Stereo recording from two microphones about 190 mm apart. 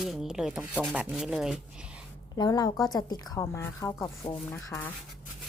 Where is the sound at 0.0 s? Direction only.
Centre (ahead or behind).